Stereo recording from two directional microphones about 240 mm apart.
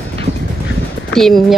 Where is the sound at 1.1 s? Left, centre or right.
Centre.